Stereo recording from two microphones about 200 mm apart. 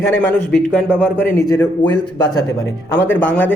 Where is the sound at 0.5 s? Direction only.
5° left (ahead or behind).